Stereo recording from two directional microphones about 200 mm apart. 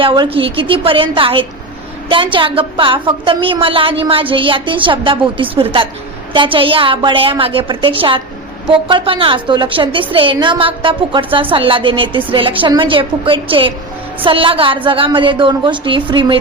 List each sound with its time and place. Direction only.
0.0 s a woman's voice: 25° right (ahead or behind)